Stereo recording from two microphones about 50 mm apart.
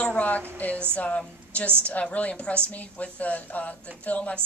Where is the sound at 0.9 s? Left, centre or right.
Left.